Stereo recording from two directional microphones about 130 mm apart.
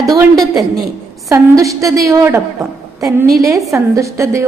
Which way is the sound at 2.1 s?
20° right (ahead or behind).